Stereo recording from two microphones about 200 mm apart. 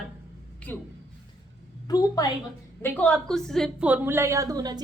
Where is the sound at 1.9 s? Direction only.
20° left (ahead or behind).